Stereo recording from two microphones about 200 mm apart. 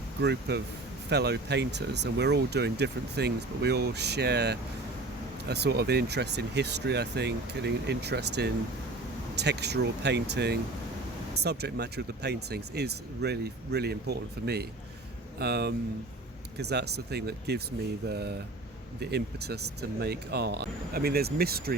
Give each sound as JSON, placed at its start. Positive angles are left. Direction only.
{"t": 0.2, "sound": "speech", "side_deg": -55}